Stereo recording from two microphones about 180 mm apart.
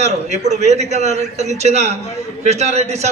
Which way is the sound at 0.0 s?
40° right (ahead or behind).